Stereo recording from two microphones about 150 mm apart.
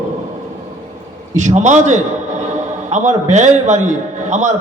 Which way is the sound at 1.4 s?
50° right (ahead or behind).